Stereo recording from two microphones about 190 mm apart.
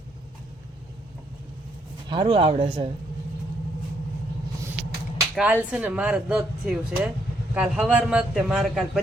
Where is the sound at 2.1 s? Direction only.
25° right (ahead or behind).